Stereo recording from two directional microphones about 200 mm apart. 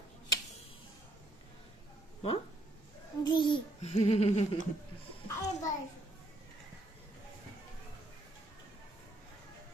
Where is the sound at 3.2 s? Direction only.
25° left (ahead or behind).